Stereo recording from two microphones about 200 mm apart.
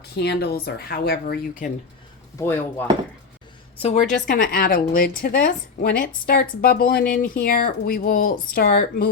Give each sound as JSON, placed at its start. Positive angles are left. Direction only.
{"t": 0.0, "sound": "a woman's voice", "side_deg": 55}
{"t": 2.4, "sound": "speech", "side_deg": 10}
{"t": 3.8, "sound": "a woman's voice", "side_deg": 35}